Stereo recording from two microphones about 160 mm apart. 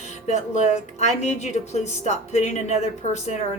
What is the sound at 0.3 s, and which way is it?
Speech, 45° left (ahead or behind).